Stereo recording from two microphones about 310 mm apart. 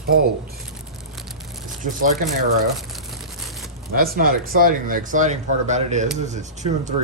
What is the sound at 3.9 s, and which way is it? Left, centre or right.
Speech, right.